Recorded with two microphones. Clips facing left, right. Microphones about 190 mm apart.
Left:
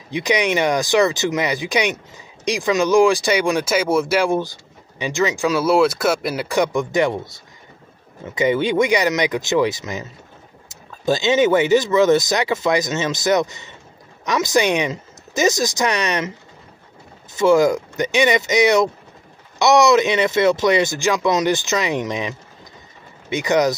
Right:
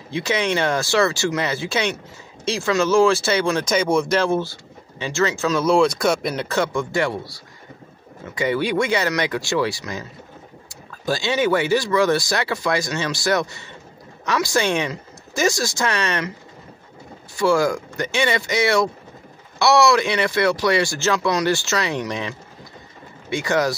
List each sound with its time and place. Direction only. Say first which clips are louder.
0.1 s speech: left 3 dB; 15° left (ahead or behind)
8.4 s speech: left 3 dB; 20° left (ahead or behind)
17.4 s speech: left 4 dB; 20° left (ahead or behind)
23.3 s speech: left 3 dB; 20° left (ahead or behind)